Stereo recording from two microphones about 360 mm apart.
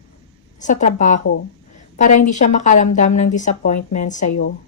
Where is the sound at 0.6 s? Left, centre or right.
Centre.